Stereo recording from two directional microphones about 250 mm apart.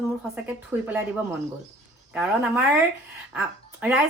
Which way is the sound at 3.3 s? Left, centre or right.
Centre.